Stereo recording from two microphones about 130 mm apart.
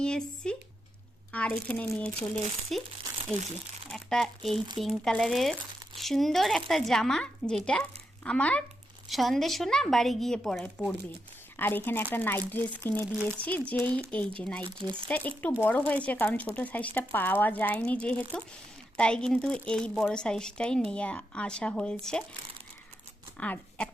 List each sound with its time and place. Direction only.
0.0 s speech: 5° left (ahead or behind)
3.9 s a child's voice: 5° left (ahead or behind)
11.5 s speech: 15° left (ahead or behind)
14.6 s speech: 40° right (ahead or behind)
15.0 s speech: 10° left (ahead or behind)
23.4 s speech: 10° left (ahead or behind)